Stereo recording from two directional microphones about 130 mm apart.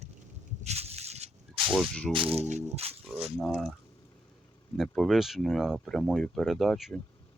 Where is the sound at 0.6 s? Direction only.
55° right (ahead or behind).